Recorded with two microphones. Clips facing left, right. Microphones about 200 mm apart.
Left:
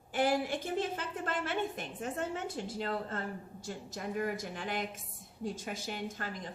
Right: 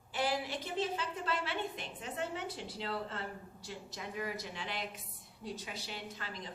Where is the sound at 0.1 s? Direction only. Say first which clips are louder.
Left 5 dB; 50° left (ahead or behind).